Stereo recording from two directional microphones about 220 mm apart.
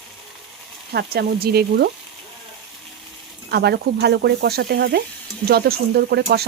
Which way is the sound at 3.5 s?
50° right (ahead or behind).